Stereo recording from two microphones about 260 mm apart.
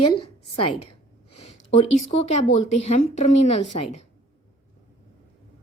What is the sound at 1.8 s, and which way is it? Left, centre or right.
Speech, left.